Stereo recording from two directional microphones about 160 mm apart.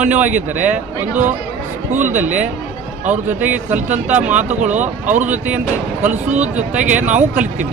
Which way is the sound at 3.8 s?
50° right (ahead or behind).